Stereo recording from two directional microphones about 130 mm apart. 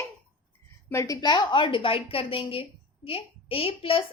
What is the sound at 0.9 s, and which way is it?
A woman's voice, 25° left (ahead or behind).